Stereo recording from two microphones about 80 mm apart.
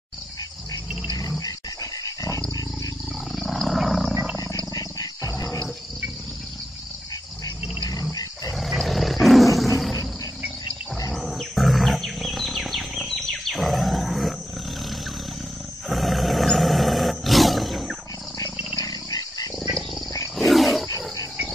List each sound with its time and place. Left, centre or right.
1.4 s dog: left
3.3 s wild animals: centre
4.7 s wild animals: left
8.5 s roar: centre
11.1 s wild animals: centre
15.9 s roar: centre
18.8 s dog: left
20.3 s wild animals: centre